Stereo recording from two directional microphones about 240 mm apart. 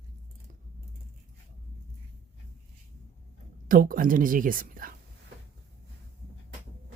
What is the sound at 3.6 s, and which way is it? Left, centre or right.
Speech, right.